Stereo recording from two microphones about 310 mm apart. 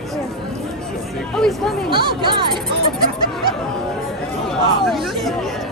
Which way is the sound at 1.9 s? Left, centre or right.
Centre.